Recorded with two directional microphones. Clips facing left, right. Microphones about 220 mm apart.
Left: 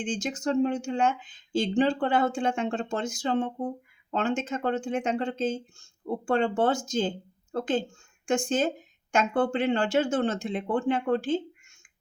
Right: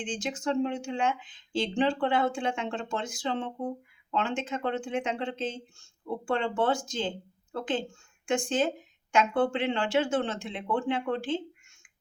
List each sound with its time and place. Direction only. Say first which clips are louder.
0.0 s speech: left 3 dB; 45° left (ahead or behind)